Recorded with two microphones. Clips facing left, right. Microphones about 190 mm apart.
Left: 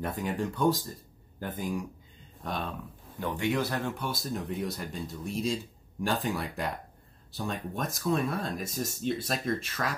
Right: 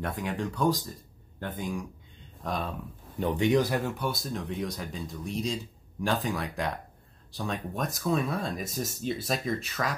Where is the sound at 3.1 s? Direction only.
20° right (ahead or behind).